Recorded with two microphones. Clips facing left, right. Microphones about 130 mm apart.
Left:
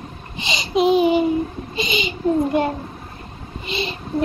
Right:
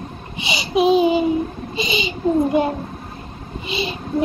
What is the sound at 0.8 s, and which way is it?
Child singing, 20° right (ahead or behind).